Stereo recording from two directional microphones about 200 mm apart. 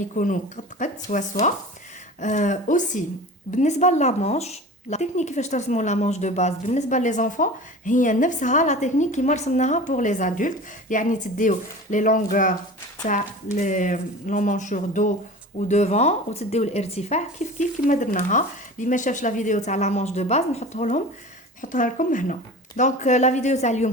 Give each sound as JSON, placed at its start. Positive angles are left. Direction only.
{"t": 0.2, "sound": "speech", "side_deg": 40}